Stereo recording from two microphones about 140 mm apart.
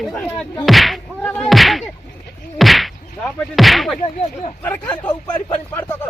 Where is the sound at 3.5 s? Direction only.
Centre (ahead or behind).